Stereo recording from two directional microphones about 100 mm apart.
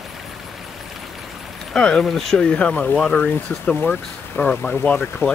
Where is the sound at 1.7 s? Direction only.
5° left (ahead or behind).